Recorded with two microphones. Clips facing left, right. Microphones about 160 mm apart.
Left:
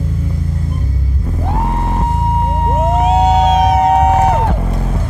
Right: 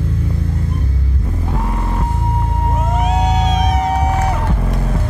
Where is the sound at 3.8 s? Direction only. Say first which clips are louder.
Left 7 dB; 50° left (ahead or behind).